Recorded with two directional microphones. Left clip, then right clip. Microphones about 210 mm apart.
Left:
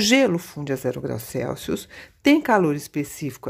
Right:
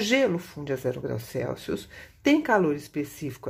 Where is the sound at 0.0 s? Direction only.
35° left (ahead or behind).